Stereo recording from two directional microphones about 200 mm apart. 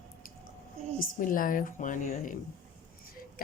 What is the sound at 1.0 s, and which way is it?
A woman's voice, 45° left (ahead or behind).